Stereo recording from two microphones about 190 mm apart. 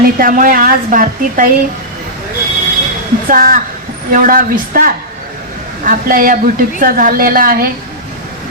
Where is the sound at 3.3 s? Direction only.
50° right (ahead or behind).